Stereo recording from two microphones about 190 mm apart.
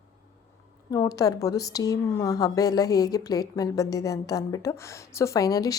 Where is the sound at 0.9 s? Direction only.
20° left (ahead or behind).